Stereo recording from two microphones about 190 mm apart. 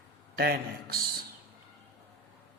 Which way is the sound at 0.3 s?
55° right (ahead or behind).